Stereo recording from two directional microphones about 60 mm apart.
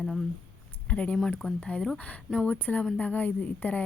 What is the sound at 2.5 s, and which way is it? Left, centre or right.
Speech, left.